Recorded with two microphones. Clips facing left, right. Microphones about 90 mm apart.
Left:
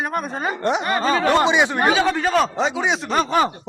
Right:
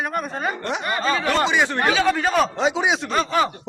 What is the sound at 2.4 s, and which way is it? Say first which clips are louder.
Speech: even; centre (ahead or behind).